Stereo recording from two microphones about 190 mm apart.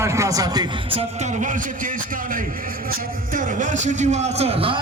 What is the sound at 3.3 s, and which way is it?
A man's voice, 40° right (ahead or behind).